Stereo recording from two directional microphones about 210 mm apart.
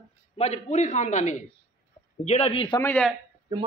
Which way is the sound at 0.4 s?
30° left (ahead or behind).